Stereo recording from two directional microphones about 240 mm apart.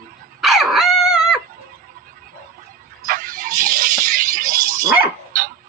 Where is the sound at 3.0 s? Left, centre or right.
Right.